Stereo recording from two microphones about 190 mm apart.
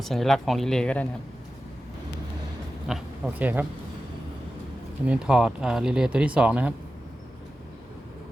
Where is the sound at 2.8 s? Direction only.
Centre (ahead or behind).